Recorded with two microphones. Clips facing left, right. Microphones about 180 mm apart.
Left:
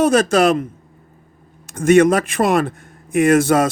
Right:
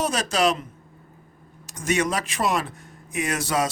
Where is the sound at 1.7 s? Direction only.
55° left (ahead or behind).